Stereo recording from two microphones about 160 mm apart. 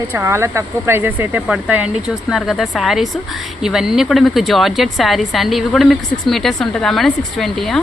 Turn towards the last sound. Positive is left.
turn(degrees=0)  # may be behind; listen again after turning